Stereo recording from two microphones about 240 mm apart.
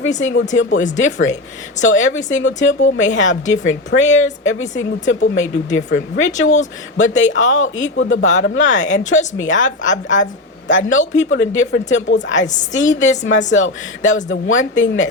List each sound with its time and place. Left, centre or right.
0.2 s speech: left
6.5 s a man's voice: left
7.3 s speech: left